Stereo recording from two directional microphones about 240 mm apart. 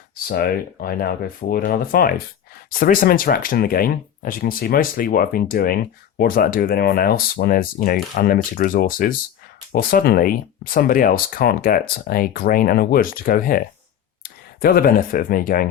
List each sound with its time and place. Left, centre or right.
0.3 s speech: left